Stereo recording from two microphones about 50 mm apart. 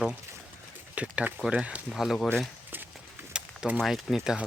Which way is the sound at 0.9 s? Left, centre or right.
Right.